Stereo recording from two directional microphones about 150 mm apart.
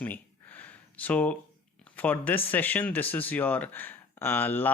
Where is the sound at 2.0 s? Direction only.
10° left (ahead or behind).